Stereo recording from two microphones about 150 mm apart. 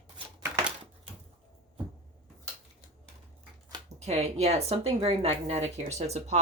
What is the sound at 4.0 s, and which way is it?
Speech, 45° right (ahead or behind).